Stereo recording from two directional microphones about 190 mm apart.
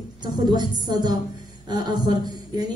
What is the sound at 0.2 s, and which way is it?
A woman's voice, 20° right (ahead or behind).